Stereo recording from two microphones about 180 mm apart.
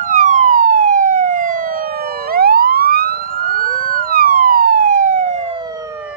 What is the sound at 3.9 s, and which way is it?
Police car, 50° right (ahead or behind).